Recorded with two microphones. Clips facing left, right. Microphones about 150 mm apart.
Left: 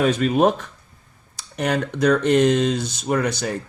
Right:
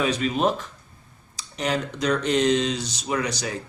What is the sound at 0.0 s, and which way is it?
Speech, 50° left (ahead or behind).